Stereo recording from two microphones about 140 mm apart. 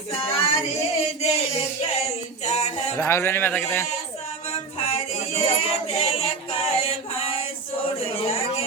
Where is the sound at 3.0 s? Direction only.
20° left (ahead or behind).